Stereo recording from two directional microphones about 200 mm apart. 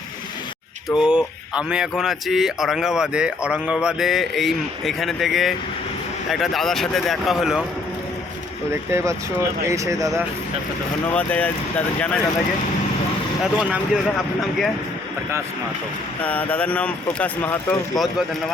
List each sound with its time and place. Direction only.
0.9 s speech: 5° right (ahead or behind)
8.9 s speech: 15° right (ahead or behind)
11.1 s speech: 5° left (ahead or behind)
13.4 s speech: 5° right (ahead or behind)
16.2 s speech: 10° left (ahead or behind)